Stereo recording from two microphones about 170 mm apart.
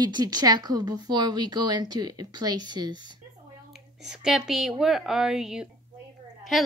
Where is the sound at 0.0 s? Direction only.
25° right (ahead or behind).